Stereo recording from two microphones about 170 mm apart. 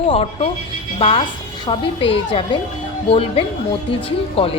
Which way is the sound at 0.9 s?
35° left (ahead or behind).